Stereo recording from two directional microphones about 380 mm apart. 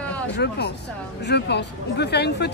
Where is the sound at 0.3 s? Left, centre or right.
Left.